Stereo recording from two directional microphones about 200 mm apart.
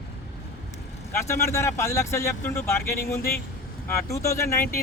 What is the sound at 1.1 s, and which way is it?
Speech, 15° left (ahead or behind).